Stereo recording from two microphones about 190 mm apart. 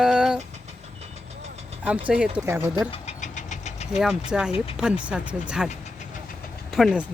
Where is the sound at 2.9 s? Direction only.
40° left (ahead or behind).